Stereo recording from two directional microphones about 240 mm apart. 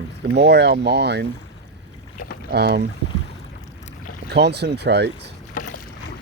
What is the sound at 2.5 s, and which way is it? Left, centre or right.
Speech, right.